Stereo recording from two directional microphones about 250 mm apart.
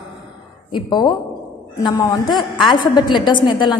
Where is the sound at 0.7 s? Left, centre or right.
Centre.